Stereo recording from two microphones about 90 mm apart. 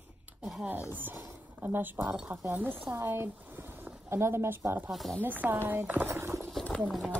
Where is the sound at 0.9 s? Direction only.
20° right (ahead or behind).